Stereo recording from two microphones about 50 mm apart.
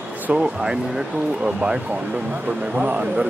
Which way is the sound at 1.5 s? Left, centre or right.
Right.